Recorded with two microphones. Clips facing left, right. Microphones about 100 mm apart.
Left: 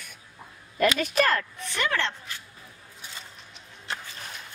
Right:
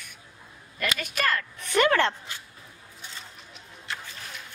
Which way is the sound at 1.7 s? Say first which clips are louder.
Right 7 dB; 55° right (ahead or behind).